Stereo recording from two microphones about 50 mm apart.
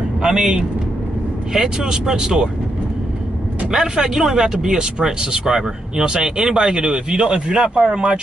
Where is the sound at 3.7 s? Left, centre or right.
Centre.